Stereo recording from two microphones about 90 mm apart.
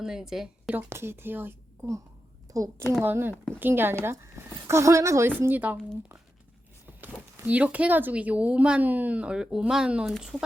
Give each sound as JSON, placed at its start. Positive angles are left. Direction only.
{"t": 0.0, "sound": "a woman's voice", "side_deg": -5}
{"t": 0.7, "sound": "speech", "side_deg": -20}
{"t": 2.5, "sound": "a woman's voice", "side_deg": -40}
{"t": 3.0, "sound": "a woman's voice", "side_deg": -25}
{"t": 7.4, "sound": "speech", "side_deg": -15}